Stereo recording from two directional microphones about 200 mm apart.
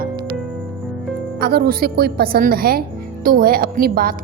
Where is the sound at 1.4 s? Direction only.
50° right (ahead or behind).